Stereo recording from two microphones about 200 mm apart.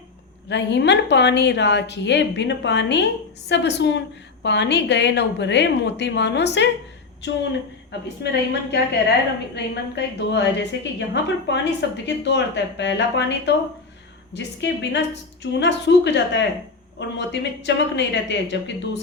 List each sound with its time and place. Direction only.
0.4 s a woman's voice: 60° left (ahead or behind)